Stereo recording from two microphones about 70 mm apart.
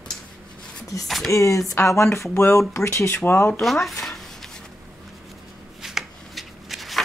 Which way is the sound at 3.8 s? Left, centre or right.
Centre.